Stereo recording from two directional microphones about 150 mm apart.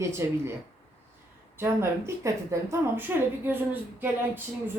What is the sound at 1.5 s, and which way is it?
Speech, 15° right (ahead or behind).